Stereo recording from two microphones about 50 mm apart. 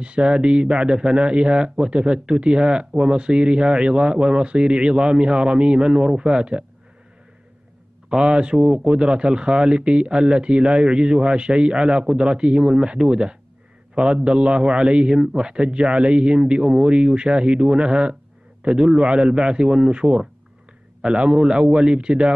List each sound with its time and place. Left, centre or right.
0.0 s speech: centre
8.1 s a man's voice: centre